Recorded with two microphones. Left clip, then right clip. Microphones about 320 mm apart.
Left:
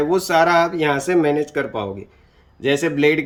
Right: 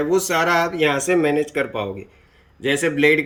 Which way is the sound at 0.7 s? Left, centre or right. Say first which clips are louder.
Even; centre.